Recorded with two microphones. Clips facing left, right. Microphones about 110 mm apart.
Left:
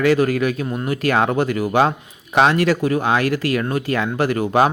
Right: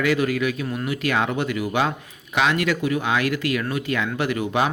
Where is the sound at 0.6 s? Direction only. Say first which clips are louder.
Left 3 dB; 30° left (ahead or behind).